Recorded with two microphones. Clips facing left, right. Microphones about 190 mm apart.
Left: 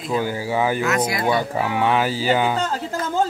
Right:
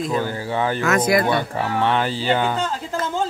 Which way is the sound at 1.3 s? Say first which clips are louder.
Left 1 dB; 10° left (ahead or behind).